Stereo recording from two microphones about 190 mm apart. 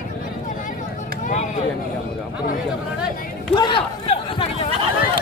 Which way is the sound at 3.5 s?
25° left (ahead or behind).